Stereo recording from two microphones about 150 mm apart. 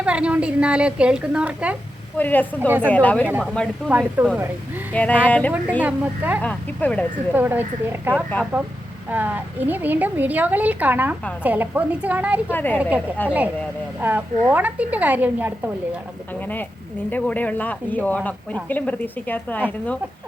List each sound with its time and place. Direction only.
0.0 s a woman's voice: 5° right (ahead or behind)
2.1 s speech: 10° left (ahead or behind)
2.6 s a woman's voice: 15° right (ahead or behind)
2.9 s speech: 10° left (ahead or behind)
3.2 s a woman's voice: 10° right (ahead or behind)
4.9 s speech: 10° left (ahead or behind)
5.8 s a woman's voice: 10° right (ahead or behind)
6.4 s speech: 10° left (ahead or behind)
7.3 s a woman's voice: 10° right (ahead or behind)
12.5 s speech: 10° left (ahead or behind)
12.7 s a woman's voice: 10° right (ahead or behind)
17.1 s speech: 10° left (ahead or behind)